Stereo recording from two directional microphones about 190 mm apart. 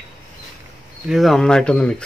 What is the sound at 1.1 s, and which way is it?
Speech, centre (ahead or behind).